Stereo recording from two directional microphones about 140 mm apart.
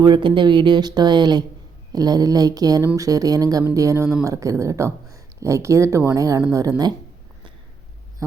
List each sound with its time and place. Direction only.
0.0 s speech: 35° right (ahead or behind)